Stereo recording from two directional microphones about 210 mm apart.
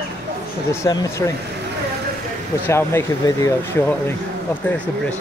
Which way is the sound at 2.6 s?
10° left (ahead or behind).